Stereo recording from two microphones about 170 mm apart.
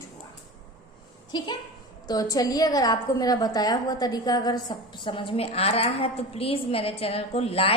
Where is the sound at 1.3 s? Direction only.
25° left (ahead or behind).